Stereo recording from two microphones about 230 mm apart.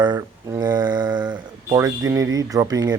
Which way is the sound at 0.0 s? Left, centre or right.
Centre.